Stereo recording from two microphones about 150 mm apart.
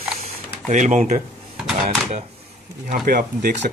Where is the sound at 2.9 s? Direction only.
70° right (ahead or behind).